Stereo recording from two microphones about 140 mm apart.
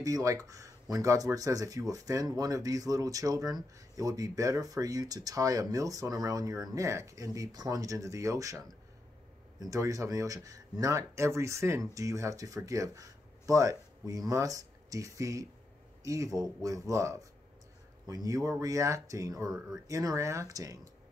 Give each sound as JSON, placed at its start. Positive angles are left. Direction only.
{"t": 0.0, "sound": "speech", "side_deg": -25}